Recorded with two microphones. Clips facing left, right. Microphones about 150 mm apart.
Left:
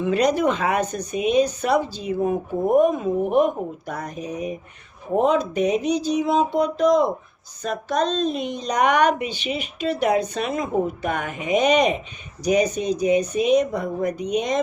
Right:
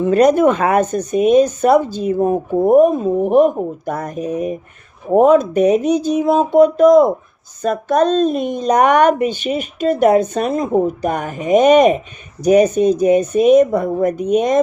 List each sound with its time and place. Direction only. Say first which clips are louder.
0.0 s speech: right 8 dB; 45° right (ahead or behind)
3.9 s speech: right 8 dB; 50° right (ahead or behind)